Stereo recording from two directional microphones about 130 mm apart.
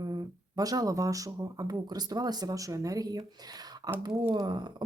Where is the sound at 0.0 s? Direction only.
30° right (ahead or behind).